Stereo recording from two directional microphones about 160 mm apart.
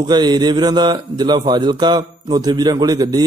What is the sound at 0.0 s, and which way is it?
A man's voice, 25° right (ahead or behind).